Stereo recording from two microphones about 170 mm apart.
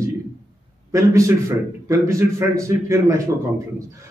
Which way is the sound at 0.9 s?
20° right (ahead or behind).